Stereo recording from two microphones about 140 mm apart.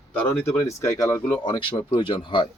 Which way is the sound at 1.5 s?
35° left (ahead or behind).